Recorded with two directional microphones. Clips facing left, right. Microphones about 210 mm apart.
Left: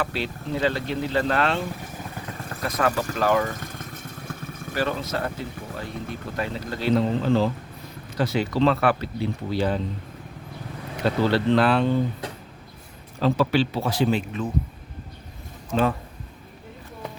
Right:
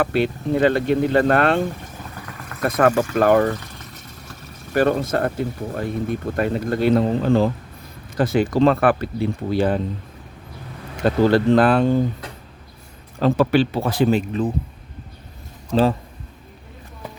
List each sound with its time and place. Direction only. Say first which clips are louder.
0.0 s speech: right 8 dB; 55° right (ahead or behind)
2.2 s vehicle: left 2 dB; 30° left (ahead or behind)
2.6 s speech: right 7 dB; 55° right (ahead or behind)
3.5 s vehicle: right 3 dB; 50° left (ahead or behind)
4.7 s speech: right 8 dB; 55° right (ahead or behind)
11.0 s speech: right 5 dB; 50° right (ahead or behind)
13.1 s speech: right 4 dB; 50° right (ahead or behind)
15.7 s speech: right 5 dB; 35° right (ahead or behind)